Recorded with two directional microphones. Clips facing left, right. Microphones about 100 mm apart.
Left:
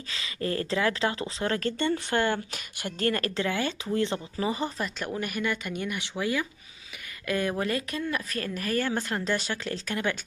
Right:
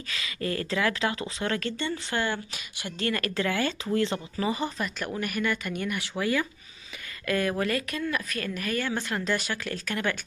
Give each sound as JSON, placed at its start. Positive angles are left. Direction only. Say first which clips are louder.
{"t": 0.1, "sound": "speech", "louder": "left 1 dB", "side_deg": 30}
{"t": 3.3, "sound": "speech", "louder": "right 1 dB", "side_deg": 20}